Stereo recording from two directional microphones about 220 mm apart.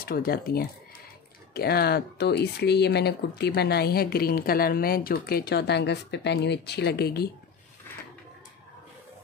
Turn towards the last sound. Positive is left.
turn(degrees=45)  # may be behind; listen again after turning